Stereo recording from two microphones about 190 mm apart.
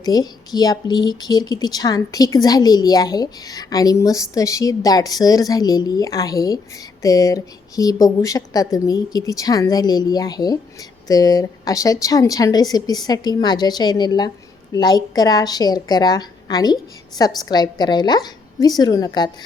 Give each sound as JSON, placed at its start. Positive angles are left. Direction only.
{"t": 0.0, "sound": "speech", "side_deg": 20}